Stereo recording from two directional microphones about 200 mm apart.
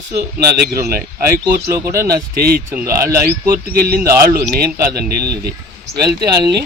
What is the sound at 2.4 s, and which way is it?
Speech, 50° right (ahead or behind).